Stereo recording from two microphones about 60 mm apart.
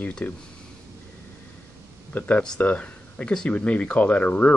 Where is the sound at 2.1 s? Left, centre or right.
Left.